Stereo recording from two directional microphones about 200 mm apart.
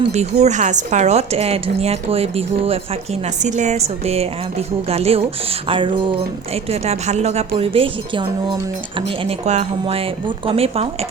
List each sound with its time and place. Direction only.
0.0 s speech: 35° right (ahead or behind)